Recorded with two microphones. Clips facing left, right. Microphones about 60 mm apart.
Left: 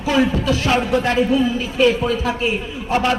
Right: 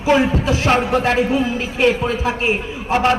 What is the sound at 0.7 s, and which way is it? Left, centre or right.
A man's voice, right.